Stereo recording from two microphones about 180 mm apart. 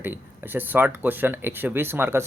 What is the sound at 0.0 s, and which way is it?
Speech, 10° right (ahead or behind).